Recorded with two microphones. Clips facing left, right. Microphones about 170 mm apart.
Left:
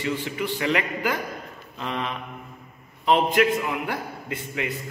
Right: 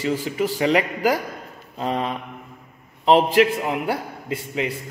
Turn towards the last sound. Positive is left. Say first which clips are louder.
# right 4 dB
turn(degrees=-30)  # may be behind; listen again after turning